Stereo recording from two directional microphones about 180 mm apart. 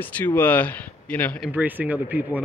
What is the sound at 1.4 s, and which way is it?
Speech, 10° right (ahead or behind).